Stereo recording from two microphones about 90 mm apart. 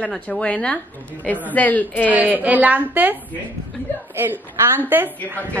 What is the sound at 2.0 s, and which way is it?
A woman's voice, 20° right (ahead or behind).